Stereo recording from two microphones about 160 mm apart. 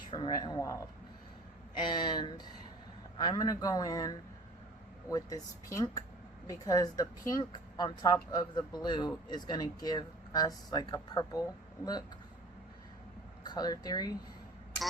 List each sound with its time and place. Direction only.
0.1 s speech: 30° left (ahead or behind)
13.4 s speech: 25° left (ahead or behind)